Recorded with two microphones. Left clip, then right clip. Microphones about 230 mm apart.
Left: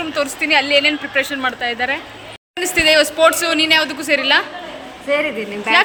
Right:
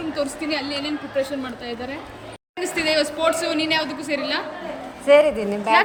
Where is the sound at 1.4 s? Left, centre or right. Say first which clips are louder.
Left 11 dB; centre.